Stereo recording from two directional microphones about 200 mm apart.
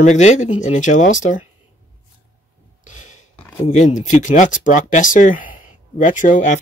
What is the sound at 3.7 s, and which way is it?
Speech, 35° left (ahead or behind).